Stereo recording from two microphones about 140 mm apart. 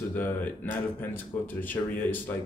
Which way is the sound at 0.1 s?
15° left (ahead or behind).